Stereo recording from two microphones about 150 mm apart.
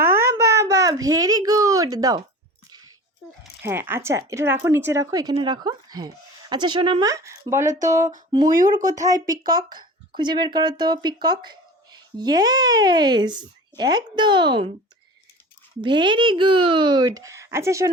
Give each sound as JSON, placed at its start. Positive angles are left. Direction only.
{"t": 0.0, "sound": "a sound", "side_deg": -15}
{"t": 3.4, "sound": "speech", "side_deg": -15}
{"t": 7.1, "sound": "speech", "side_deg": -20}
{"t": 7.9, "sound": "a sound", "side_deg": -55}
{"t": 8.3, "sound": "speech", "side_deg": -30}
{"t": 15.8, "sound": "speech", "side_deg": -30}